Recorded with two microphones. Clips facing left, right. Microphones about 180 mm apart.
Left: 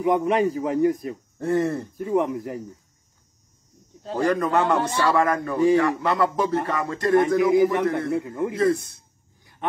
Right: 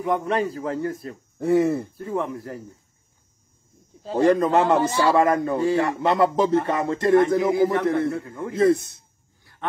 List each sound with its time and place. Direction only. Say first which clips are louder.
0.0 s a man's voice: left 3 dB; 15° left (ahead or behind)
1.4 s speech: right 3 dB; 10° right (ahead or behind)
2.0 s a man's voice: left 4 dB; 15° left (ahead or behind)
3.9 s a sound: right 3 dB; centre (ahead or behind)
4.2 s speech: right 4 dB; 25° right (ahead or behind)
4.7 s speech: right 3 dB; centre (ahead or behind)
5.0 s speech: right 2 dB; 25° right (ahead or behind)
8.1 s a man's voice: left 4 dB; 20° left (ahead or behind)
8.5 s speech: right 5 dB; 25° right (ahead or behind)
9.4 s dog: left 1 dB; 15° left (ahead or behind)